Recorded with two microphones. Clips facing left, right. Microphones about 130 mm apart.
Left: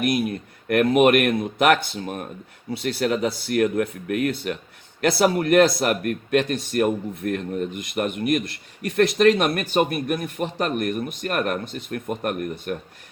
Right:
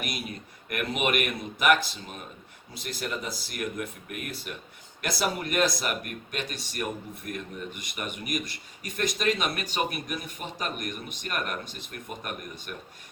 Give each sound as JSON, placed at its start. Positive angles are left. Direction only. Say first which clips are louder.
{"t": 0.0, "sound": "speech", "louder": "left 13 dB", "side_deg": 55}
{"t": 2.7, "sound": "speech", "louder": "left 11 dB", "side_deg": 70}
{"t": 5.0, "sound": "speech", "louder": "left 11 dB", "side_deg": 60}
{"t": 7.6, "sound": "speech", "louder": "left 11 dB", "side_deg": 50}
{"t": 8.8, "sound": "speech", "louder": "left 12 dB", "side_deg": 70}